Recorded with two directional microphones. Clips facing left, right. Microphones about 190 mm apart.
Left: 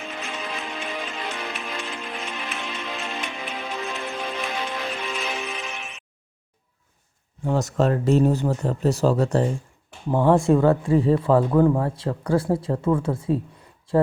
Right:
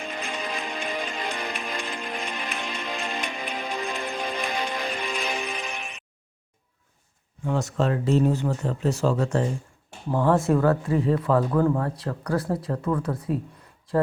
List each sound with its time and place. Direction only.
0.0 s music: 5° left (ahead or behind)
7.4 s speech: 40° left (ahead or behind)